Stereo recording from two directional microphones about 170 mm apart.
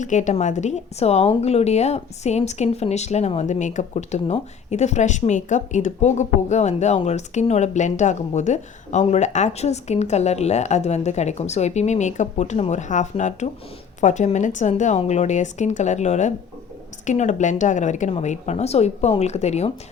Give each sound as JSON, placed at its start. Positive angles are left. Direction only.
{"t": 0.0, "sound": "a woman's voice", "side_deg": 45}